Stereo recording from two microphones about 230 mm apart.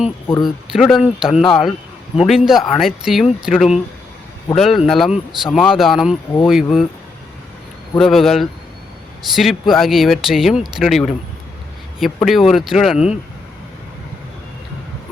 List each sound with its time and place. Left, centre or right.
0.4 s speech: centre
7.9 s speech: centre